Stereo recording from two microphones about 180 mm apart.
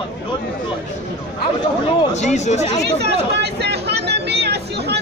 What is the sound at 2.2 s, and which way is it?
Speech, 40° left (ahead or behind).